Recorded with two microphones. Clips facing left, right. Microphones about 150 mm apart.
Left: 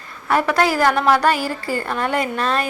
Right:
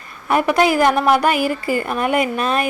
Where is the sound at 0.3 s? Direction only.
15° right (ahead or behind).